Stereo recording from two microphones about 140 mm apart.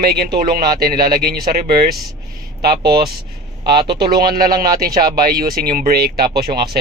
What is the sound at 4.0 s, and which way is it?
Speech, 90° right.